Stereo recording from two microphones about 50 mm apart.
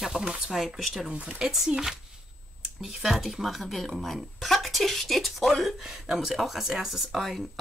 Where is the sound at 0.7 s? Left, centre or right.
Centre.